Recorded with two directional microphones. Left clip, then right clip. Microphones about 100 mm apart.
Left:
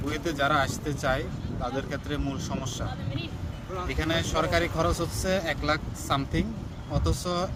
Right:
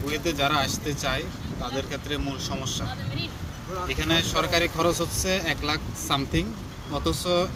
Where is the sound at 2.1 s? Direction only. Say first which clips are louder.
Right 3 dB; 45° left (ahead or behind).